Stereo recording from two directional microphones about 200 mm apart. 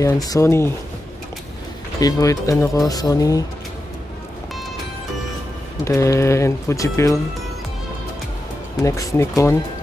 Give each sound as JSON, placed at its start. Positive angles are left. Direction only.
{"t": 0.0, "sound": "speech", "side_deg": 15}
{"t": 2.0, "sound": "speech", "side_deg": 15}
{"t": 5.9, "sound": "speech", "side_deg": 15}
{"t": 8.8, "sound": "speech", "side_deg": 15}